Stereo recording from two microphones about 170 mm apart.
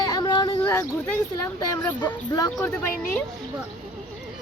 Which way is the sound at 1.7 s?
20° left (ahead or behind).